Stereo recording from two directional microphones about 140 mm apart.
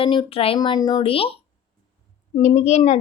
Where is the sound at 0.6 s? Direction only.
30° left (ahead or behind).